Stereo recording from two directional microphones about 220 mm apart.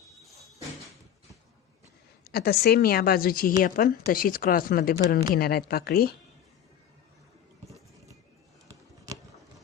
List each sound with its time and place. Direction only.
2.3 s a woman's voice: 45° left (ahead or behind)